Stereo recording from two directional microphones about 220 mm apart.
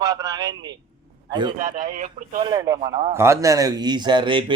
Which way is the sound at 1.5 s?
35° right (ahead or behind).